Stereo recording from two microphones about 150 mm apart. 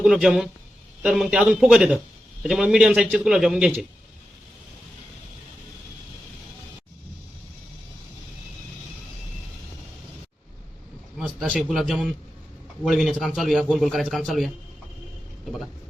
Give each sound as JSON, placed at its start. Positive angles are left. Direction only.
{"t": 0.0, "sound": "a man's voice", "side_deg": -5}
{"t": 11.2, "sound": "a man's voice", "side_deg": -10}